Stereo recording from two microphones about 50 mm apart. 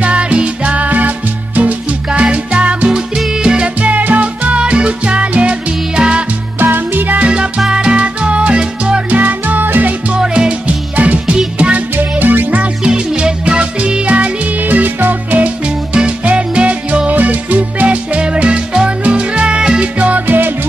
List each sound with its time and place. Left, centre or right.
0.0 s music: right
3.4 s salsa music: right
6.6 s music: right
7.2 s music: right
9.1 s music: right
10.1 s music: centre
11.0 s music: right
12.0 s music: right
12.8 s music: centre; by 15.5 s right
15.6 s music: right
17.1 s music: right
20.2 s music: right